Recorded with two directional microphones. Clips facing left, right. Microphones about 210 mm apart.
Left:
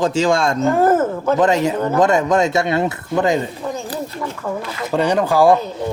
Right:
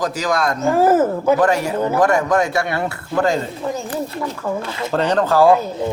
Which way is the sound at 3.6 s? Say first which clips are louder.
Right 1 dB; 5° right (ahead or behind).